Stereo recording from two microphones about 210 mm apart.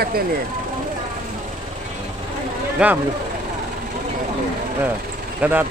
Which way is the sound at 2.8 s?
5° right (ahead or behind).